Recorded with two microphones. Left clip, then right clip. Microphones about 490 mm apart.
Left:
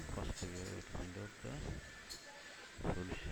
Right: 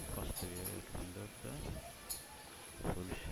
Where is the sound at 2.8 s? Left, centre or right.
Centre.